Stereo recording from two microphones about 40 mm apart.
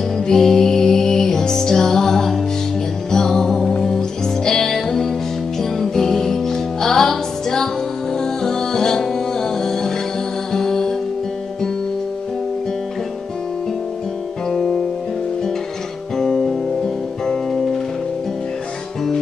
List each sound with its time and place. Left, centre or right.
0.3 s music: centre
14.5 s music: centre
16.2 s music: centre